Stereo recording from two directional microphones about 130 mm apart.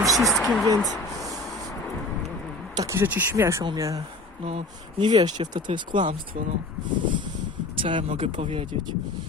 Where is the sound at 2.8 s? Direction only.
20° right (ahead or behind).